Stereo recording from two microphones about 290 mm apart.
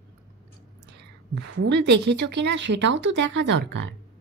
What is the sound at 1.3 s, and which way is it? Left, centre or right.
Speech, right.